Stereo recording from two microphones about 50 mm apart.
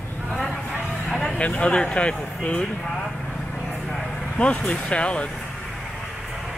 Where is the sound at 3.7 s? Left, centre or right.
Centre.